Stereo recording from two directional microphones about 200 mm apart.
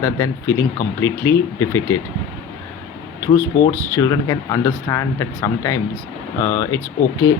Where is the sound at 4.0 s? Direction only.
15° left (ahead or behind).